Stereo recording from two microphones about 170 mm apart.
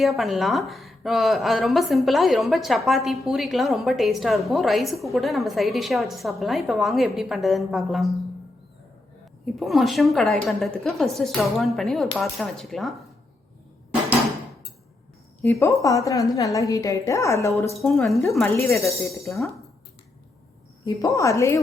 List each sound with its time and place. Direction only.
0.0 s speech: centre (ahead or behind)
9.6 s speech: centre (ahead or behind)
15.4 s a woman's voice: 15° left (ahead or behind)
17.7 s speech: 5° left (ahead or behind)
20.8 s a woman's voice: 20° left (ahead or behind)